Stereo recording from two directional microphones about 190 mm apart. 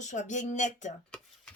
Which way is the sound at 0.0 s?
40° left (ahead or behind).